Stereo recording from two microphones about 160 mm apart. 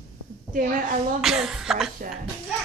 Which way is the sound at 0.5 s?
60° right (ahead or behind).